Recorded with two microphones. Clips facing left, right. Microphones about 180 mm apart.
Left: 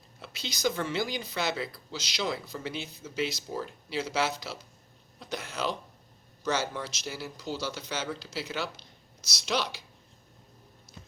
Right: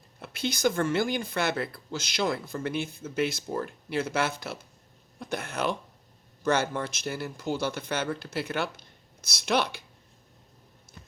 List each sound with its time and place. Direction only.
0.2 s speech: 55° right (ahead or behind)